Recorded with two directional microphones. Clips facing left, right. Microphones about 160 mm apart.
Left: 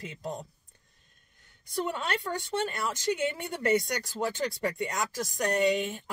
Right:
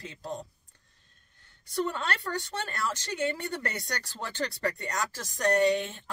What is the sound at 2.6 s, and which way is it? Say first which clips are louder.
Speech: left 4 dB; 15° left (ahead or behind).